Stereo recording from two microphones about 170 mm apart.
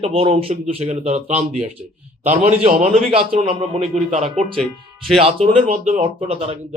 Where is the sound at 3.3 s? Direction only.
30° right (ahead or behind).